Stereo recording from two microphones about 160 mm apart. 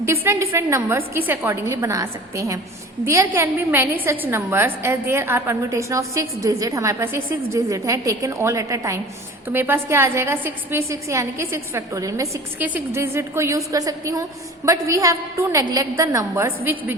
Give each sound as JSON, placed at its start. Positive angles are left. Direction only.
{"t": 0.0, "sound": "a woman's voice", "side_deg": -15}